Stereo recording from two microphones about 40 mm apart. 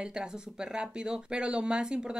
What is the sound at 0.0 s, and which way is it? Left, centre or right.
Speech, right.